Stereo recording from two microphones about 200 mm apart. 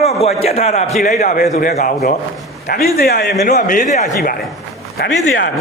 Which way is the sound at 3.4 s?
40° left (ahead or behind).